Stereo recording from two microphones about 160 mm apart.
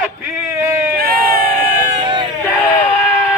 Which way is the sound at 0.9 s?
65° right (ahead or behind).